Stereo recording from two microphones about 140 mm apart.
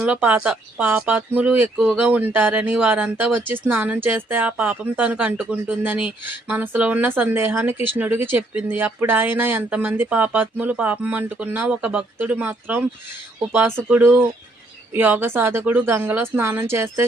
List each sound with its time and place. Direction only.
0.0 s speech: 10° right (ahead or behind)